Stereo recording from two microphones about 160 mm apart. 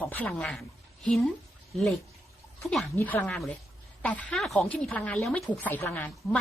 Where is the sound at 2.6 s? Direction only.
5° left (ahead or behind).